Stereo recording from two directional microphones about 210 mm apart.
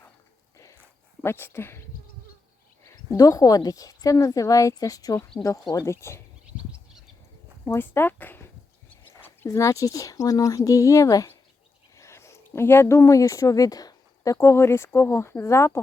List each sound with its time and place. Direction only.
0.5 s a sound: 15° left (ahead or behind)
1.2 s a woman's voice: 10° left (ahead or behind)
2.8 s a woman's voice: 15° left (ahead or behind)
7.6 s a woman's voice: 10° left (ahead or behind)